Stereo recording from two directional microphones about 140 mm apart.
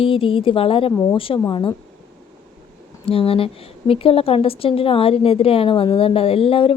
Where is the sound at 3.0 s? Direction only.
40° left (ahead or behind).